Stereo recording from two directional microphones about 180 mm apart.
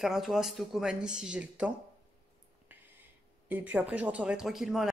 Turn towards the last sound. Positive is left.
turn(degrees=0)  # may be behind; listen again after turning